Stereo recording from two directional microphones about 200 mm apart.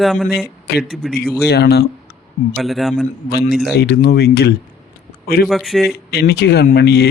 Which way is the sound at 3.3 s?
50° left (ahead or behind).